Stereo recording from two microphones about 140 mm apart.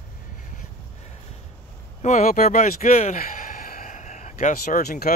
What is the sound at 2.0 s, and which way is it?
Speech, 55° left (ahead or behind).